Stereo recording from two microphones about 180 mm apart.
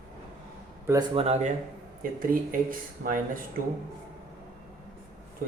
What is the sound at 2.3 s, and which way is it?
Speech, 50° right (ahead or behind).